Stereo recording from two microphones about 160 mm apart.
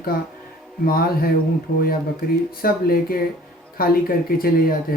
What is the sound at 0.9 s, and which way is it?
Speech, 70° left (ahead or behind).